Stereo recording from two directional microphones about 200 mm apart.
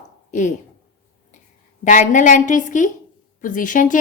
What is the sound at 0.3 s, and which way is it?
Speech, 40° left (ahead or behind).